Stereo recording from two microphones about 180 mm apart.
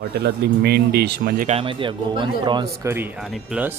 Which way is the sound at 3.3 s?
5° right (ahead or behind).